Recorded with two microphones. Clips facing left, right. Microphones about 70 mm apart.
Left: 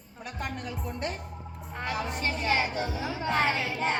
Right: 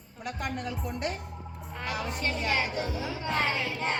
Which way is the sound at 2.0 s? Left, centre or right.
Left.